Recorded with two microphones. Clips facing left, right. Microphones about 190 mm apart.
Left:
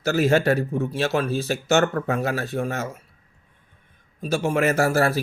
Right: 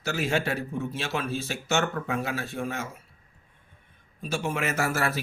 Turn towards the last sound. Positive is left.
turn(degrees=35)  # may be behind; listen again after turning